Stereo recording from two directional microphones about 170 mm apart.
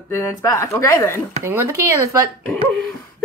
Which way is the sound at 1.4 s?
15° right (ahead or behind).